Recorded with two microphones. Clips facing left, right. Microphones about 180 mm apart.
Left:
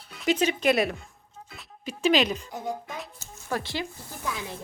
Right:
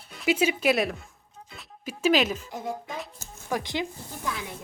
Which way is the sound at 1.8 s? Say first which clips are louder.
Even; 5° right (ahead or behind).